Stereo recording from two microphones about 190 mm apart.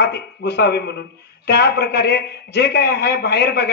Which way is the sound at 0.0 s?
60° left (ahead or behind).